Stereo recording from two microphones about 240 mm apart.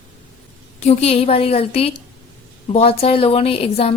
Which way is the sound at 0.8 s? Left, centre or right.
Left.